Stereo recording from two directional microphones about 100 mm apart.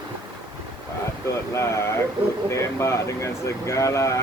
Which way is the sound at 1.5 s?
30° left (ahead or behind).